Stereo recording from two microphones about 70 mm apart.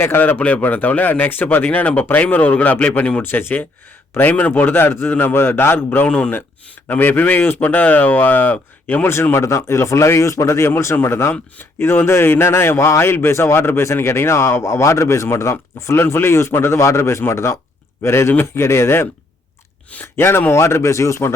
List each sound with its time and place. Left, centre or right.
0.0 s a man's voice: left
6.1 s speech: centre
6.8 s speech: left
9.3 s a man's voice: left
20.1 s a man's voice: left